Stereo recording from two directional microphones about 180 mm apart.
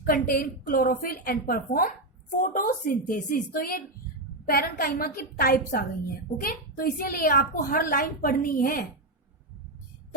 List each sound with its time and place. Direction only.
0.0 s a woman's voice: 55° left (ahead or behind)